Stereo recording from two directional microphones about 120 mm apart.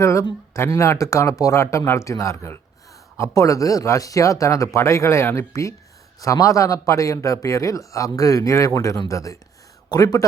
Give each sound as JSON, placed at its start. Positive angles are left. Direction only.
{"t": 0.0, "sound": "a man's voice", "side_deg": 25}